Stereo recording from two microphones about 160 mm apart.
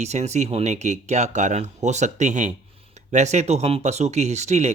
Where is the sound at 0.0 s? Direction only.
45° right (ahead or behind).